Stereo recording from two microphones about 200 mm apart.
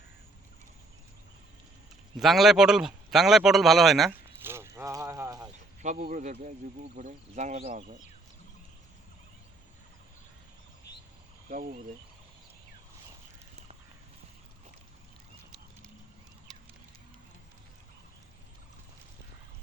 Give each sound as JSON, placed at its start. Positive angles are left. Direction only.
{"t": 2.2, "sound": "speech", "side_deg": 0}
{"t": 4.4, "sound": "clip-clop", "side_deg": -15}
{"t": 5.8, "sound": "speech", "side_deg": -40}
{"t": 11.4, "sound": "speech", "side_deg": -45}